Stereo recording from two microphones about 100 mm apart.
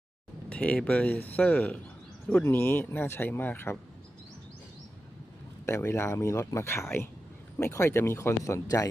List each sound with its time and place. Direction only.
0.5 s speech: 15° left (ahead or behind)
5.6 s speech: 25° left (ahead or behind)